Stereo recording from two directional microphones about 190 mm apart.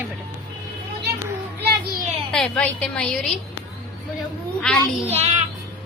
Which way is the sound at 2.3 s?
5° left (ahead or behind).